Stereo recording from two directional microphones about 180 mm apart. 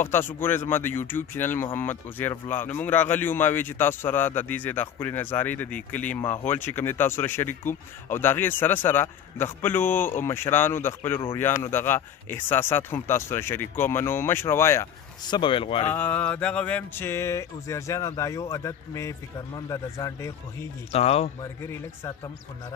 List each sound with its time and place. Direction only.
0.0 s speech: 10° left (ahead or behind); by 15.9 s 30° left (ahead or behind)
15.9 s speech: 10° left (ahead or behind)
20.9 s speech: 35° left (ahead or behind)